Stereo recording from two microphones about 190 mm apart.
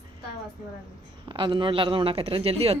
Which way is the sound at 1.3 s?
25° right (ahead or behind).